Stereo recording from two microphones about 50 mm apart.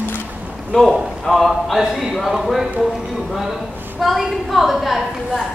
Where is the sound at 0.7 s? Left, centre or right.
Centre.